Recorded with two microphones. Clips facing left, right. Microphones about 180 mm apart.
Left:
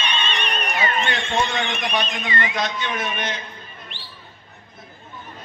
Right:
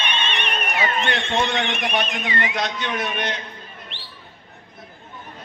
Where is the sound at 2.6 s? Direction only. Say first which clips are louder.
Even; 65° right (ahead or behind).